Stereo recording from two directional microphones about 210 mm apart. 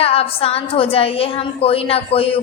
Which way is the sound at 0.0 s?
30° left (ahead or behind).